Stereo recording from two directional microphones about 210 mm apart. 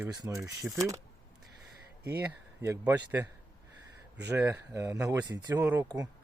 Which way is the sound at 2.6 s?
10° right (ahead or behind).